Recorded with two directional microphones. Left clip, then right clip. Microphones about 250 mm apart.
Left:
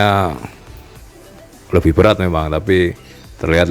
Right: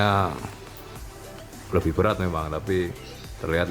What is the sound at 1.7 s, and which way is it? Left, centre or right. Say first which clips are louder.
Speech: left 11 dB; left.